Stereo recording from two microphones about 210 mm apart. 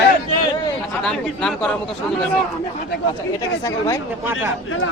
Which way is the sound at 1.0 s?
5° left (ahead or behind).